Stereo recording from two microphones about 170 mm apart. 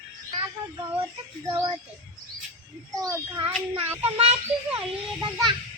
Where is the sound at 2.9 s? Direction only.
20° right (ahead or behind).